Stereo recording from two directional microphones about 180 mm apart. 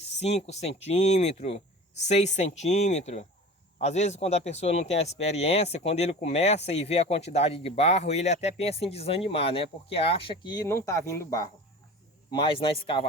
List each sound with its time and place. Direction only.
0.2 s speech: 35° left (ahead or behind); by 11.4 s 15° left (ahead or behind)
12.3 s speech: 30° left (ahead or behind)